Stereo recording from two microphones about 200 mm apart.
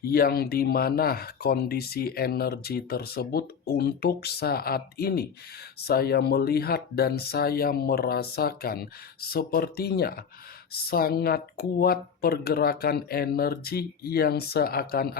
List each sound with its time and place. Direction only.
0.0 s speech: 45° left (ahead or behind)